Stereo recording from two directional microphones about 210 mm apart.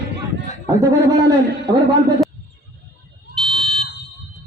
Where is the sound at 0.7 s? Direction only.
15° right (ahead or behind).